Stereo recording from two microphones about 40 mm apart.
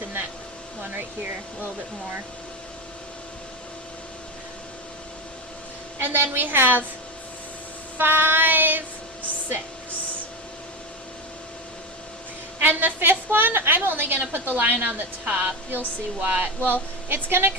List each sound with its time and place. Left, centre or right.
6.0 s a woman's voice: right
7.9 s child singing: right
12.5 s a woman's voice: right
14.2 s child singing: right
15.2 s speech: right
15.7 s a woman's voice: right
16.6 s speech: left
17.1 s a woman's voice: right